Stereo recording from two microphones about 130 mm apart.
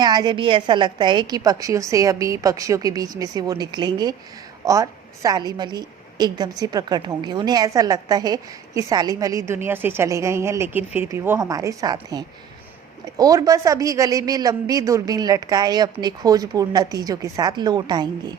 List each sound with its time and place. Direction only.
0.0 s a woman's voice: 35° right (ahead or behind)